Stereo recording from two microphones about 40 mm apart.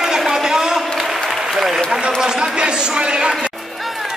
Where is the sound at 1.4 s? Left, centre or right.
Centre.